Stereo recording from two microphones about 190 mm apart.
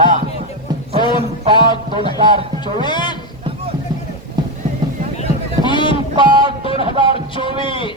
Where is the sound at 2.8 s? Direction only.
25° left (ahead or behind).